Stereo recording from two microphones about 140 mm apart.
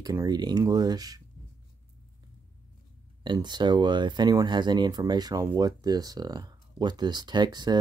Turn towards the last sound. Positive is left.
turn(degrees=-30)  # may be behind; listen again after turning